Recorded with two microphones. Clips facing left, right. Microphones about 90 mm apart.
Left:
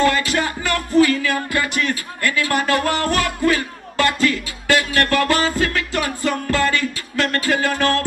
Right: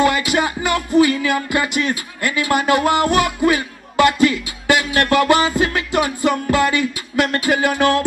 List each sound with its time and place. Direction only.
0.0 s music: 15° right (ahead or behind)